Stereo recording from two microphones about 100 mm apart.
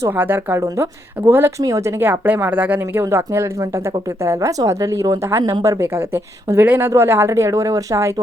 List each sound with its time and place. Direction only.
0.2 s speech: 20° right (ahead or behind)
2.0 s speech: 20° right (ahead or behind)
6.5 s speech: 25° right (ahead or behind)